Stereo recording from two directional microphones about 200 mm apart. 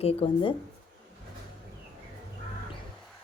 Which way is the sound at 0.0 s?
30° left (ahead or behind).